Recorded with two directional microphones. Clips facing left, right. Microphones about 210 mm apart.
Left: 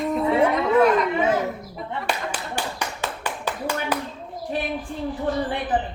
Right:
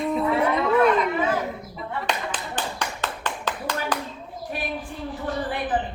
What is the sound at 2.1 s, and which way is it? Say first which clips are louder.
Clapping: left 2 dB; 10° left (ahead or behind).